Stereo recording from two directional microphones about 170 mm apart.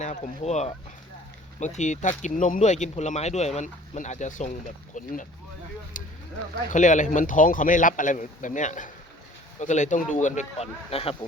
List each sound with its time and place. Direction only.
0.0 s speech: 40° left (ahead or behind)
4.9 s a sound: 50° left (ahead or behind)
6.0 s vehicle: 50° left (ahead or behind)
6.7 s speech: 45° left (ahead or behind)